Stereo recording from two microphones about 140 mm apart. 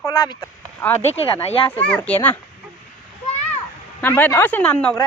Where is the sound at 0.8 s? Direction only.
15° left (ahead or behind).